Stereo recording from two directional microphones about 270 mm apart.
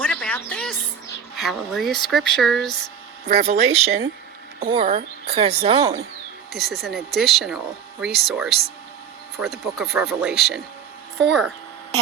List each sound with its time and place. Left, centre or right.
0.0 s a sound: centre
1.4 s speech: centre
3.2 s speech: right
4.6 s speech: right
6.5 s speech: centre